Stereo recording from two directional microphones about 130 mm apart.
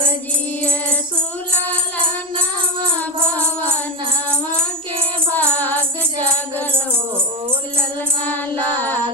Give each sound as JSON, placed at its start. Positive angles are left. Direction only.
{"t": 5.4, "sound": "music", "side_deg": 15}